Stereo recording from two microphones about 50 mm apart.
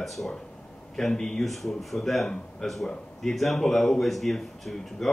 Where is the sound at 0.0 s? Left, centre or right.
Centre.